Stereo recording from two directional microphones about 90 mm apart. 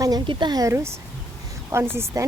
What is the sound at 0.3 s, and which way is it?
Speech, 55° right (ahead or behind).